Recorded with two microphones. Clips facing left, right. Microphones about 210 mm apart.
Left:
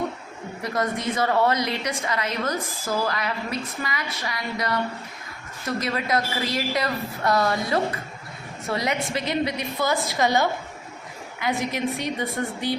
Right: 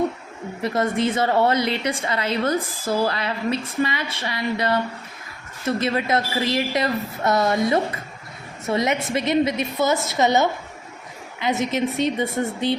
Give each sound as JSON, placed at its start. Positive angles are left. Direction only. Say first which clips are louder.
{"t": 0.6, "sound": "a woman's voice", "louder": "right 5 dB", "side_deg": -25}